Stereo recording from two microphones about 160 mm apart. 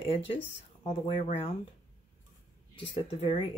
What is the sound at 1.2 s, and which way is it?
Speech, 35° left (ahead or behind).